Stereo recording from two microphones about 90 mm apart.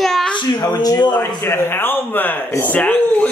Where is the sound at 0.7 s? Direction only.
50° left (ahead or behind).